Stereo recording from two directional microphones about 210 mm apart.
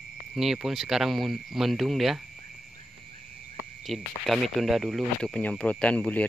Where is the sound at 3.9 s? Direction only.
Centre (ahead or behind).